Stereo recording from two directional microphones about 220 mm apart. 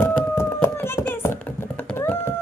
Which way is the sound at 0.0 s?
10° left (ahead or behind).